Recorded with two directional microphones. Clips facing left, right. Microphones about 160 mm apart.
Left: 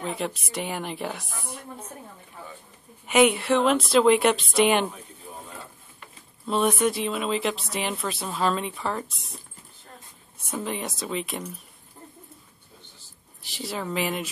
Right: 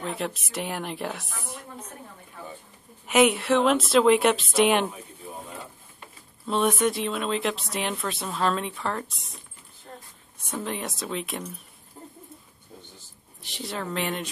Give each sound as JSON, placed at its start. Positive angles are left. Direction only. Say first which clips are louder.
{"t": 0.0, "sound": "speech", "louder": "left 1 dB", "side_deg": 0}
{"t": 3.1, "sound": "speech", "louder": "left 1 dB", "side_deg": 0}
{"t": 4.9, "sound": "bird", "louder": "right 2 dB", "side_deg": -15}
{"t": 6.4, "sound": "speech", "louder": "left 1 dB", "side_deg": 0}
{"t": 10.5, "sound": "speech", "louder": "left 1 dB", "side_deg": 0}
{"t": 13.4, "sound": "speech", "louder": "left 1 dB", "side_deg": 0}